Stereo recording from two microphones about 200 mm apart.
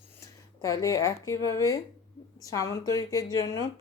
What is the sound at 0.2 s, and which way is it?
Speech, 15° left (ahead or behind).